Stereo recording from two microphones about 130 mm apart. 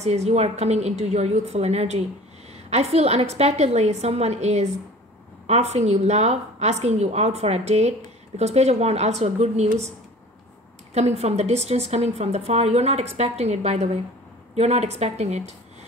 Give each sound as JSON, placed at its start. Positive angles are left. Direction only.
{"t": 0.0, "sound": "a woman's voice", "side_deg": -60}
{"t": 11.0, "sound": "a woman's voice", "side_deg": -55}